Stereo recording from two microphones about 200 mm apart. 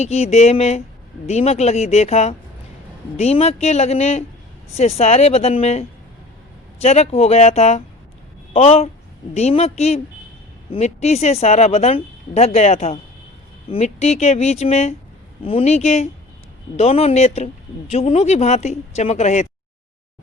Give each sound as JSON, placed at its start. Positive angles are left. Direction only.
{"t": 0.0, "sound": "speech", "side_deg": 30}